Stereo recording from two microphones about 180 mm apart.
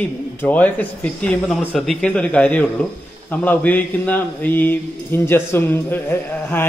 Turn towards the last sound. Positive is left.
turn(degrees=10)  # may be behind; listen again after turning